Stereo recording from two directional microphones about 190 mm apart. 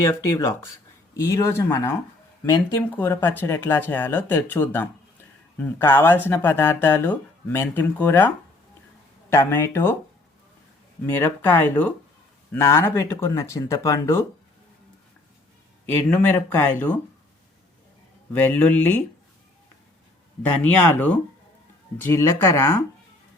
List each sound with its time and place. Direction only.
0.0 s speech: 15° left (ahead or behind)
9.3 s speech: 15° left (ahead or behind)
11.0 s speech: 10° left (ahead or behind)
15.9 s speech: 5° left (ahead or behind)
18.3 s speech: 10° left (ahead or behind)
20.6 s speech: 10° left (ahead or behind)